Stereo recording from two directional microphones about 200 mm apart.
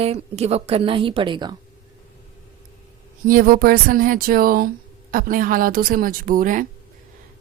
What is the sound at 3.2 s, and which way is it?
A woman's voice, 45° right (ahead or behind).